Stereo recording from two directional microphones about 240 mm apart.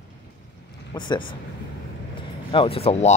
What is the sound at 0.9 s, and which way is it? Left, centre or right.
Speech, centre.